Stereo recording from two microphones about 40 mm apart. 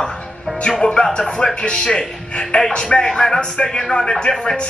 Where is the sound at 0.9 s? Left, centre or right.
Centre.